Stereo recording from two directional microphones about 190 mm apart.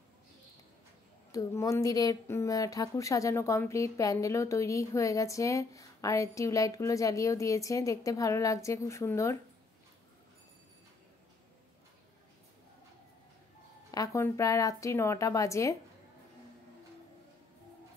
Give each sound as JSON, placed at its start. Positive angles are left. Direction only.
{"t": 1.3, "sound": "speech", "side_deg": 15}
{"t": 13.9, "sound": "speech", "side_deg": 15}